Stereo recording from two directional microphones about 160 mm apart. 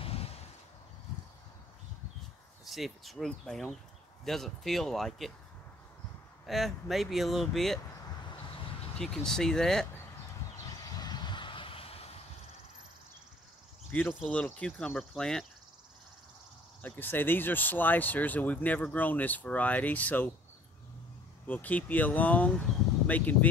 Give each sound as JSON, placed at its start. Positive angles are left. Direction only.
{"t": 0.0, "sound": "a sound", "side_deg": 40}
{"t": 2.6, "sound": "speech", "side_deg": 0}
{"t": 6.4, "sound": "speech", "side_deg": 0}
{"t": 8.9, "sound": "speech", "side_deg": 5}
{"t": 11.0, "sound": "vehicle", "side_deg": 25}
{"t": 14.2, "sound": "speech", "side_deg": 5}
{"t": 16.8, "sound": "speech", "side_deg": 10}
{"t": 21.5, "sound": "speech", "side_deg": 10}